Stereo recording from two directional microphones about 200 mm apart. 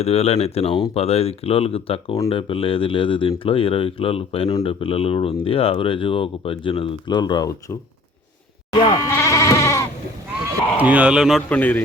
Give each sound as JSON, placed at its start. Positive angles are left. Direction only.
{"t": 0.0, "sound": "speech", "side_deg": 30}
{"t": 9.0, "sound": "goat", "side_deg": 15}
{"t": 10.8, "sound": "speech", "side_deg": -5}